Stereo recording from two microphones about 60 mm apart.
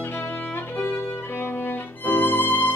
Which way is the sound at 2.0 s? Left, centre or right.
Left.